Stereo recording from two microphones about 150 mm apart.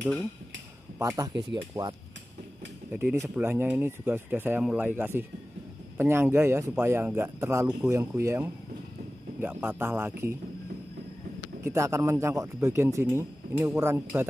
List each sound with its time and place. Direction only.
0.9 s speech: 20° right (ahead or behind)
2.9 s speech: 15° right (ahead or behind)
11.4 s speech: 20° right (ahead or behind)